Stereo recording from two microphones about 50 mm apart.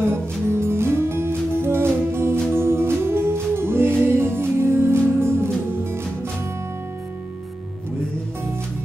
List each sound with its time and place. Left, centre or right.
0.1 s music: right